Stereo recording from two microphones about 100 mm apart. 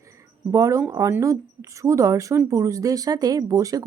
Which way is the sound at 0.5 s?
30° right (ahead or behind).